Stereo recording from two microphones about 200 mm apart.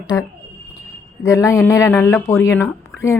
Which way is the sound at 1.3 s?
15° left (ahead or behind).